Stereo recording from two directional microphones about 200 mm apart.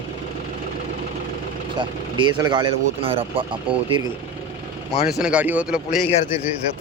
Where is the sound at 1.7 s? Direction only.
20° right (ahead or behind).